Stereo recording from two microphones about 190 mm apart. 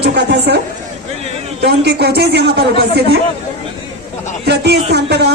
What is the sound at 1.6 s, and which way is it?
A man's voice, 60° right (ahead or behind).